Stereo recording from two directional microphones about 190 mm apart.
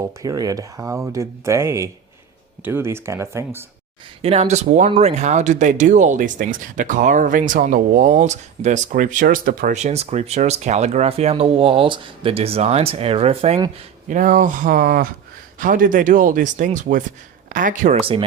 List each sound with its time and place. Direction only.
0.0 s speech: 20° right (ahead or behind)
4.2 s speech: 30° right (ahead or behind)
14.1 s speech: 45° right (ahead or behind)